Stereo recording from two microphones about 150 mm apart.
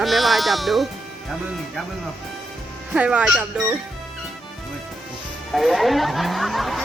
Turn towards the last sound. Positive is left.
turn(degrees=0)  # may be behind; listen again after turning